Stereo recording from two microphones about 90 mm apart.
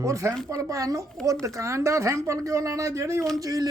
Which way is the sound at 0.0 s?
35° right (ahead or behind).